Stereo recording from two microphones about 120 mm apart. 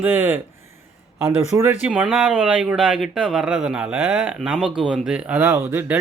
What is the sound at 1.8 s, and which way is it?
Speech, 10° right (ahead or behind).